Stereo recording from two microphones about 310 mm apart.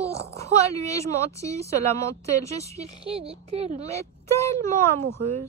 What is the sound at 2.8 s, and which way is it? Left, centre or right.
Speech, centre.